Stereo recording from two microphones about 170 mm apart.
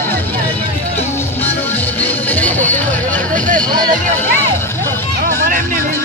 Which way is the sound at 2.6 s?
10° left (ahead or behind).